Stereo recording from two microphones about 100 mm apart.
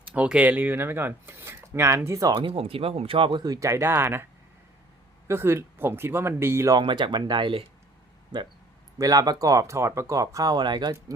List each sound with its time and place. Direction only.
0.1 s speech: 10° right (ahead or behind); by 2.3 s 30° right (ahead or behind)
2.3 s speech: 60° right (ahead or behind)
3.4 s speech: 35° right (ahead or behind)
5.3 s speech: 25° right (ahead or behind)
6.7 s speech: 50° right (ahead or behind)